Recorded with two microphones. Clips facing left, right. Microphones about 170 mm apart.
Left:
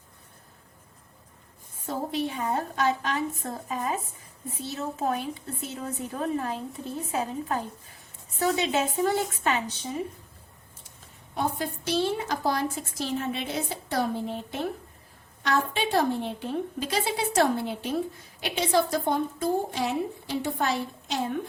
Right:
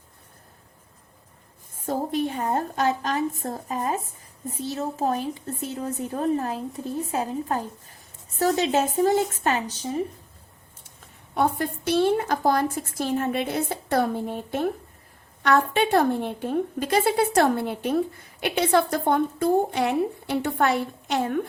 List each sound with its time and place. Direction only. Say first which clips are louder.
1.7 s a woman's voice: right 4 dB; 50° right (ahead or behind)
11.3 s a woman's voice: right 5 dB; 60° right (ahead or behind)